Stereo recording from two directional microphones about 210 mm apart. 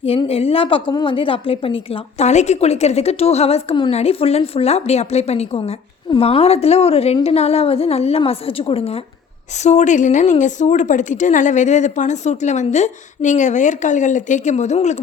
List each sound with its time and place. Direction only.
0.0 s a woman's voice: 25° left (ahead or behind)